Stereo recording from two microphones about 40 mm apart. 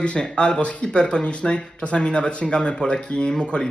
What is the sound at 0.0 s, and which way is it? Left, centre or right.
Speech, left.